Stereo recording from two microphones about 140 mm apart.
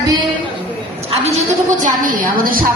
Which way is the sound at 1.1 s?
55° right (ahead or behind).